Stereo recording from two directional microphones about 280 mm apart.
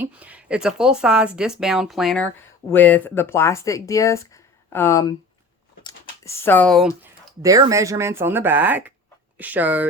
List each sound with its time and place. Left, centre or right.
0.0 s speech: centre